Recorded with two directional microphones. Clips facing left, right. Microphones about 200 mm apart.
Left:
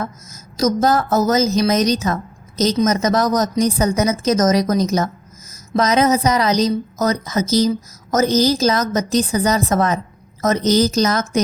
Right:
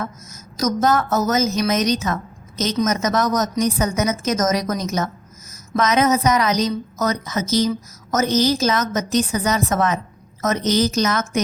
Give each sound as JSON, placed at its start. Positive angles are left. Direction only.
{"t": 0.0, "sound": "a woman's voice", "side_deg": 30}